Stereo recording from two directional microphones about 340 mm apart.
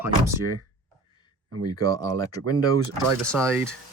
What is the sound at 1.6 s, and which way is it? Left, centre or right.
Speech, centre.